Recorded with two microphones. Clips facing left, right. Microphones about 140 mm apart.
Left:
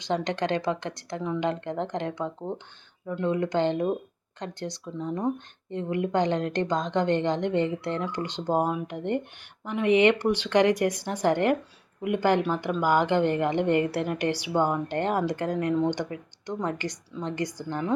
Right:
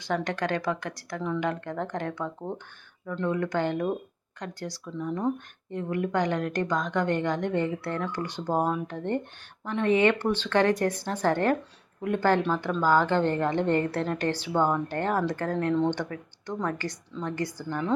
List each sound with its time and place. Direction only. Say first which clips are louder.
0.0 s a woman's voice: left 1 dB; 20° left (ahead or behind)